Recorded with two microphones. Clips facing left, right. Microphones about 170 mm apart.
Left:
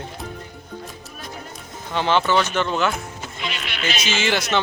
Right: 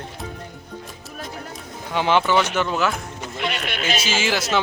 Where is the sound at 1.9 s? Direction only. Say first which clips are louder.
Right 1 dB; 10° right (ahead or behind).